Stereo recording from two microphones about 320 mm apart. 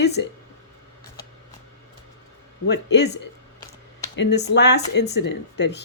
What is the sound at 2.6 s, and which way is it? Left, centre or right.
Speech, left.